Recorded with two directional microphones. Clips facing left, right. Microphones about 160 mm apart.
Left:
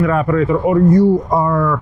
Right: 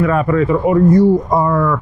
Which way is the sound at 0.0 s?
20° right (ahead or behind).